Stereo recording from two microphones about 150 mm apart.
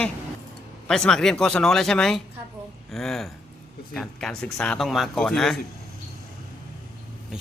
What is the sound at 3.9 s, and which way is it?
Speech, 5° left (ahead or behind).